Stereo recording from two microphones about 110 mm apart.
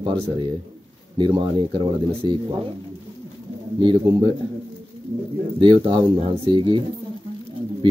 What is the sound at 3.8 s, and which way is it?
Speech, 45° right (ahead or behind).